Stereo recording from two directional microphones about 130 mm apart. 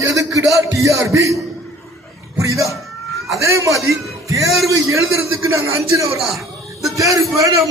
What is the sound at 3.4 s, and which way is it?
Speech, 25° right (ahead or behind).